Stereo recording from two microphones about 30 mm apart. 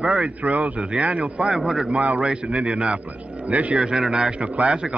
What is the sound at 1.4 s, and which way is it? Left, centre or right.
Speech, right.